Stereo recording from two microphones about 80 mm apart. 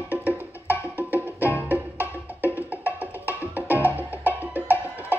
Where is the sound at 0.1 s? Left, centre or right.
Right.